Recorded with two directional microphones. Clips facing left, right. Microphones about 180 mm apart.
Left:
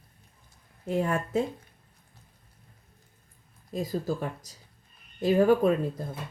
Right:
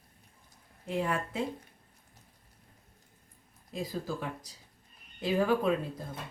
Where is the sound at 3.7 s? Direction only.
45° left (ahead or behind).